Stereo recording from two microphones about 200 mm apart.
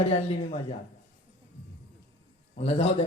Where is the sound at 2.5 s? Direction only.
30° left (ahead or behind).